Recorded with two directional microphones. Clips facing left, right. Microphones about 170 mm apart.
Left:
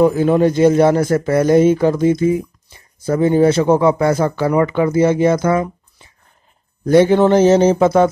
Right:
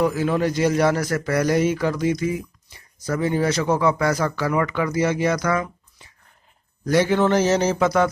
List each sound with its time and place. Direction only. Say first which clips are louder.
0.0 s a man's voice: left 8 dB; 30° left (ahead or behind)